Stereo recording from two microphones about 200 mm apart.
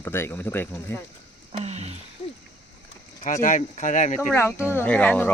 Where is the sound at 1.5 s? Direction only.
30° right (ahead or behind).